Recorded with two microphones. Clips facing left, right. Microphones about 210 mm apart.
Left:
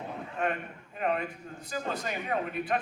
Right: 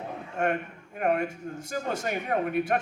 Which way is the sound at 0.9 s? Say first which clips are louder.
Right 4 dB; 50° right (ahead or behind).